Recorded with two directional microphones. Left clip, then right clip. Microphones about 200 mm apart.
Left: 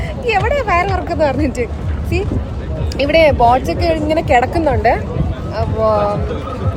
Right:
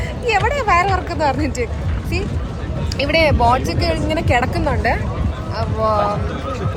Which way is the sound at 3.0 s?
20° left (ahead or behind).